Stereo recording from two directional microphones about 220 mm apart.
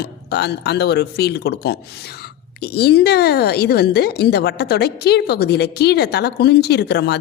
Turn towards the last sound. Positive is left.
turn(degrees=50)  # may be behind; listen again after turning